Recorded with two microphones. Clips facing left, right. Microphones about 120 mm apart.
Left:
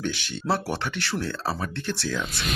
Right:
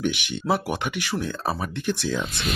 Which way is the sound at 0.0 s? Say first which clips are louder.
Right 3 dB; 15° right (ahead or behind).